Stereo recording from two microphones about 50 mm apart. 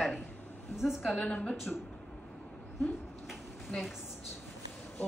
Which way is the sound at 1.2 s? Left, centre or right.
Left.